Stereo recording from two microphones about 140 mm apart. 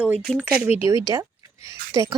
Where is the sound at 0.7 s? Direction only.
45° left (ahead or behind).